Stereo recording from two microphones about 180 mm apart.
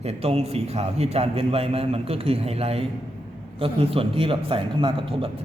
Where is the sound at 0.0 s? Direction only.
35° right (ahead or behind).